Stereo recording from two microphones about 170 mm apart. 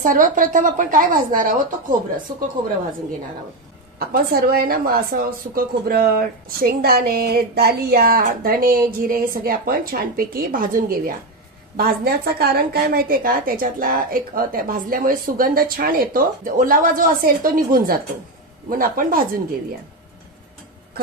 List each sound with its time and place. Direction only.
0.0 s speech: 50° right (ahead or behind)
4.1 s a woman's voice: 65° right (ahead or behind)